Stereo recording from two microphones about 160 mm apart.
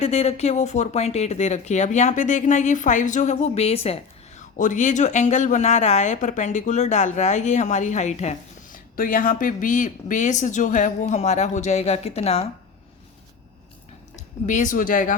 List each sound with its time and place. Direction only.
0.0 s speech: 40° left (ahead or behind)
4.5 s speech: 50° left (ahead or behind)
9.0 s speech: 60° left (ahead or behind); by 12.5 s 40° left (ahead or behind)
14.2 s speech: 50° left (ahead or behind)